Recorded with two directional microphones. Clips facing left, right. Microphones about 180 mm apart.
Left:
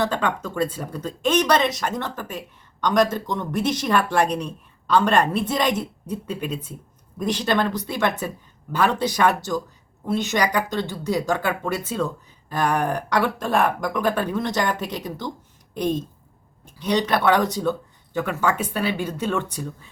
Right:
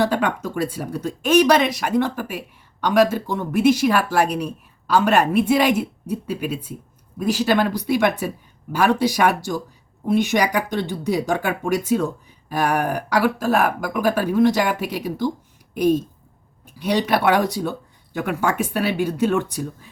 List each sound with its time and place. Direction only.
0.0 s speech: 10° right (ahead or behind)